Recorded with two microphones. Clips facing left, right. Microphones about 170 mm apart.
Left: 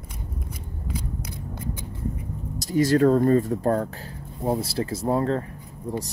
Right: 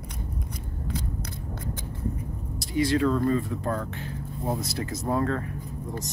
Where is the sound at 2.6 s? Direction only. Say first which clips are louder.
Left 5 dB; 45° left (ahead or behind).